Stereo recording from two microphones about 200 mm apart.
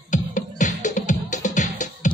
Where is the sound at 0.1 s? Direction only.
40° left (ahead or behind).